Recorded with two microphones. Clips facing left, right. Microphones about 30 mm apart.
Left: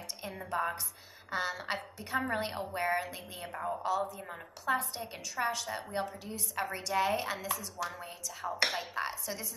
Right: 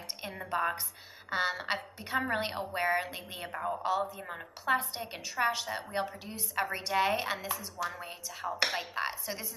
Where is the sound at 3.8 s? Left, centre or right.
Right.